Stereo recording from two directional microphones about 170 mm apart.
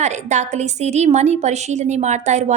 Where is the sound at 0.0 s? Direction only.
45° right (ahead or behind).